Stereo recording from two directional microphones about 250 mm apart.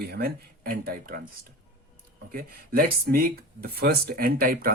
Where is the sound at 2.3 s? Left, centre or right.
Right.